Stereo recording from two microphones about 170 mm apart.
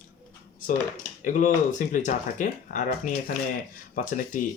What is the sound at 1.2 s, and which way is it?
Speech, 50° left (ahead or behind).